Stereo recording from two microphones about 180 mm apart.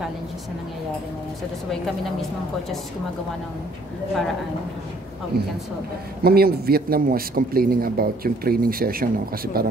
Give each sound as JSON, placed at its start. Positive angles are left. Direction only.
{"t": 5.3, "sound": "a man's voice", "side_deg": -65}